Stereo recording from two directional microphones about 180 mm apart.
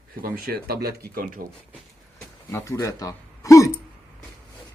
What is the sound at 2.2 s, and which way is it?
Speech, 15° left (ahead or behind).